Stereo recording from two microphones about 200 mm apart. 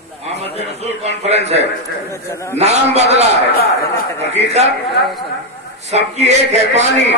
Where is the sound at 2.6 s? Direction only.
35° right (ahead or behind).